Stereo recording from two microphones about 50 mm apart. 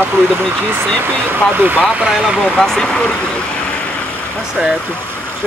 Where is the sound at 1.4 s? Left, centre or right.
Centre.